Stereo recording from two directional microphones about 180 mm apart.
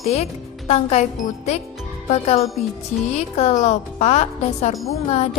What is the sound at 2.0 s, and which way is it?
A woman's voice, 35° left (ahead or behind).